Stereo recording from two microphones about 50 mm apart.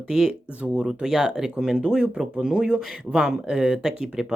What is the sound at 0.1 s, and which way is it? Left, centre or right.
Speech, centre.